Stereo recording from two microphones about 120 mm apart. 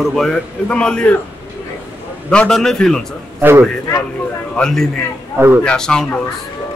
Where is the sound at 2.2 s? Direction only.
5° left (ahead or behind).